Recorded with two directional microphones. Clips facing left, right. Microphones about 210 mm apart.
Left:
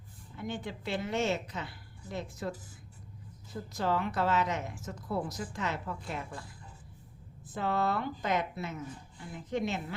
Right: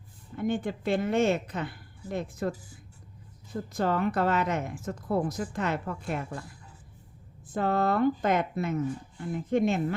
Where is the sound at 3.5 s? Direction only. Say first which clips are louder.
Right 4 dB; 50° right (ahead or behind).